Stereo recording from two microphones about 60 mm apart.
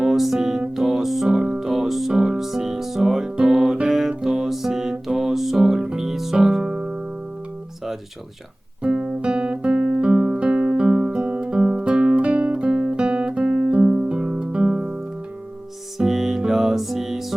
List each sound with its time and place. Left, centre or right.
0.0 s music: centre
8.8 s guitar: centre
14.1 s music: centre
16.0 s music: centre